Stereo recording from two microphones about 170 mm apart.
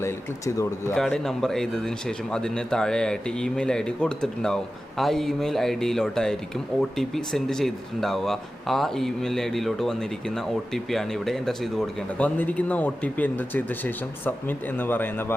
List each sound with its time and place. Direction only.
0.0 s speech: 20° left (ahead or behind)
0.9 s speech: 5° left (ahead or behind)